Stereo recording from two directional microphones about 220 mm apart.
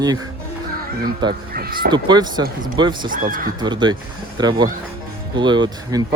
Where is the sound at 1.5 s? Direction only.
40° right (ahead or behind).